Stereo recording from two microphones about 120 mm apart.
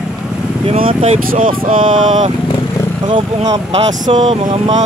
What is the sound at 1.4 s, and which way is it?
Speech, 90° right.